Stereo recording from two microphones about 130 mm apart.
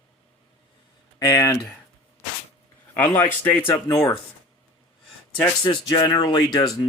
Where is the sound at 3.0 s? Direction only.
10° left (ahead or behind).